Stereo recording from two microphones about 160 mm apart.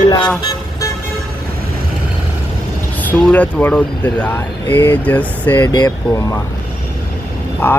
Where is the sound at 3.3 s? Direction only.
10° left (ahead or behind).